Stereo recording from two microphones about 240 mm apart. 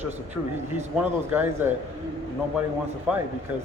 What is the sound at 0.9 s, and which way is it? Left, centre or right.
Speech, centre.